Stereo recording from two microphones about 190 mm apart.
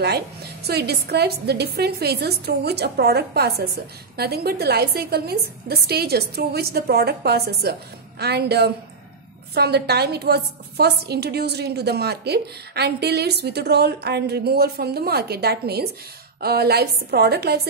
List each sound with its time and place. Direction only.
0.0 s a woman's voice: 60° right (ahead or behind)